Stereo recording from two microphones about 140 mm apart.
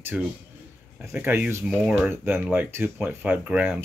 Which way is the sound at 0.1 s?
10° right (ahead or behind).